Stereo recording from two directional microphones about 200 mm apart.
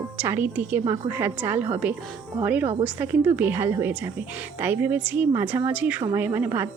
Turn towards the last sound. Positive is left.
turn(degrees=-10)  # may be behind; listen again after turning